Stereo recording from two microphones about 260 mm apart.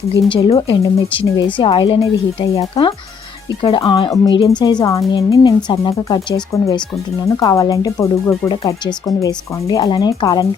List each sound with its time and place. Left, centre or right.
0.3 s speech: centre
1.2 s speech: centre
1.5 s speech: centre